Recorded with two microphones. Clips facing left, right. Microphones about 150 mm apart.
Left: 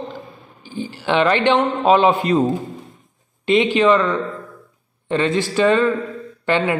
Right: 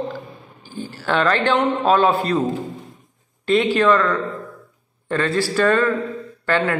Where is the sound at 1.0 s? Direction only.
15° left (ahead or behind).